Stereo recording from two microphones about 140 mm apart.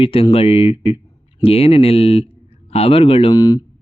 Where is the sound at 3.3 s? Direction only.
30° left (ahead or behind).